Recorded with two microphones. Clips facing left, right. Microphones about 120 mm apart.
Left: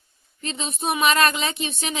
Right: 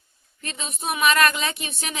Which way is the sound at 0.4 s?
25° left (ahead or behind).